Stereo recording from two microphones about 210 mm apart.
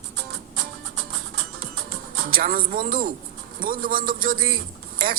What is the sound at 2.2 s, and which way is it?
A woman's voice, 45° right (ahead or behind).